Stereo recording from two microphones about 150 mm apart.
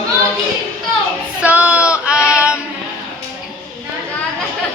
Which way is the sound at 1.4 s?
10° right (ahead or behind).